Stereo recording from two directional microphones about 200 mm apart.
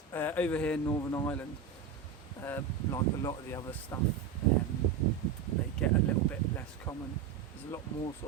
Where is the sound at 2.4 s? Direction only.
15° left (ahead or behind).